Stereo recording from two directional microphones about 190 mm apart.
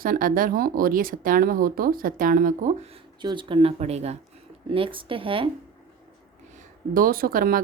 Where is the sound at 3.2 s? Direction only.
25° right (ahead or behind).